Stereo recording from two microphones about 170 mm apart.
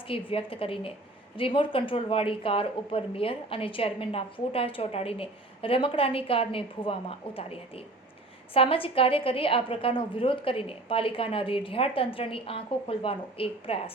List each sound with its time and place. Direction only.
0.1 s speech: 30° left (ahead or behind)